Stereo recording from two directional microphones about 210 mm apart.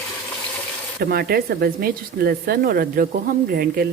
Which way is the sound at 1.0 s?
45° right (ahead or behind).